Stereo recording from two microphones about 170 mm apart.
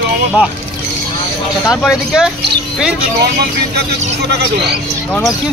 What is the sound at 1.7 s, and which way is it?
Speech, centre (ahead or behind).